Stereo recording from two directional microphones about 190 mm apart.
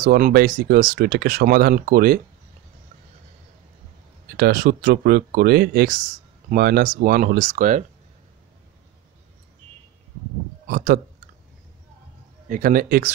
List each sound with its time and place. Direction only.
0.0 s speech: 50° right (ahead or behind)
4.4 s speech: 50° right (ahead or behind)
10.7 s speech: 50° right (ahead or behind)
12.4 s speech: 50° right (ahead or behind)